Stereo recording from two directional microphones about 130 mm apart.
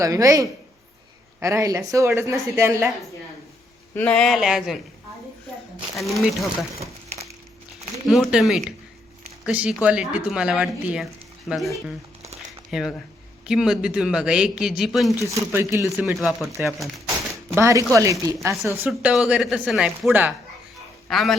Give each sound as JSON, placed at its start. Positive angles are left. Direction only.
{"t": 0.0, "sound": "speech", "side_deg": -25}
{"t": 3.9, "sound": "speech", "side_deg": 10}
{"t": 6.0, "sound": "speech", "side_deg": 0}
{"t": 6.7, "sound": "a sound", "side_deg": -55}
{"t": 8.0, "sound": "speech", "side_deg": 0}
{"t": 12.7, "sound": "speech", "side_deg": 0}
{"t": 15.2, "sound": "speech", "side_deg": -20}
{"t": 16.0, "sound": "speech", "side_deg": -5}
{"t": 17.5, "sound": "speech", "side_deg": -25}
{"t": 19.0, "sound": "a man's voice", "side_deg": -5}